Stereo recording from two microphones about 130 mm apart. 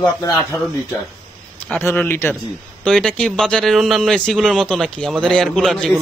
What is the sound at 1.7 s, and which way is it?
Speech, 15° left (ahead or behind).